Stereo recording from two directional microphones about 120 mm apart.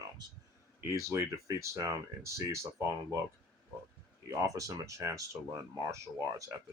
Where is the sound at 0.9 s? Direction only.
25° right (ahead or behind).